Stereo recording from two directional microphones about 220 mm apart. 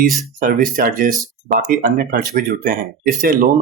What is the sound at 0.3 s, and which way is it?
Speech, 40° right (ahead or behind).